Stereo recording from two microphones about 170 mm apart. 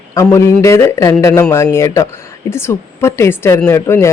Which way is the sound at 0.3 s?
15° left (ahead or behind).